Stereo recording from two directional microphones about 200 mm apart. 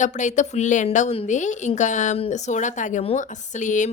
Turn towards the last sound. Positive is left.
turn(degrees=40)  # may be behind; listen again after turning